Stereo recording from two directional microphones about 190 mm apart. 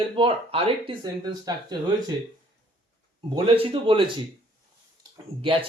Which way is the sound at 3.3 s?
25° right (ahead or behind).